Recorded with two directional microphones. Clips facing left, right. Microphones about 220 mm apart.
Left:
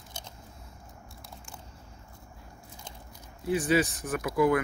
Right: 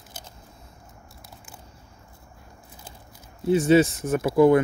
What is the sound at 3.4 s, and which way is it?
Speech, 25° right (ahead or behind).